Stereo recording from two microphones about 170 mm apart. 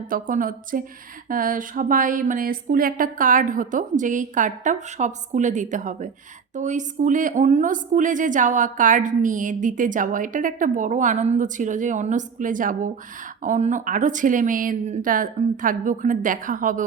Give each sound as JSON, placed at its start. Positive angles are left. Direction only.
{"t": 0.1, "sound": "a woman's voice", "side_deg": -55}